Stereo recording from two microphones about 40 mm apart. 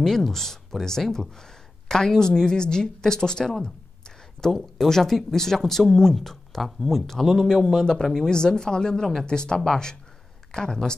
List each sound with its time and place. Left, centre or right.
0.0 s speech: centre